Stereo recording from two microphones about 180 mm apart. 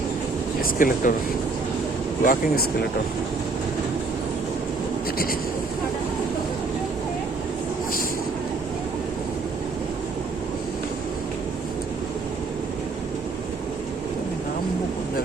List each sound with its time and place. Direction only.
0.6 s speech: 50° left (ahead or behind)
2.2 s speech: 50° left (ahead or behind)